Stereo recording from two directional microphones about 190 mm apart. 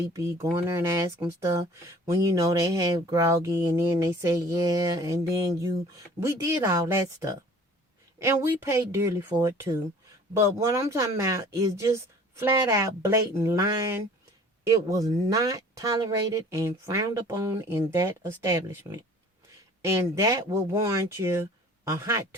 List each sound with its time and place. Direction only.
0.1 s speech: 15° right (ahead or behind)